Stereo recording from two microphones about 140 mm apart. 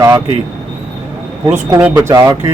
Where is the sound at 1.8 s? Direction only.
15° right (ahead or behind).